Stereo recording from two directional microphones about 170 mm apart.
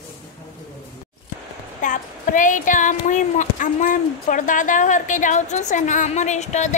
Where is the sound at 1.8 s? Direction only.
50° left (ahead or behind).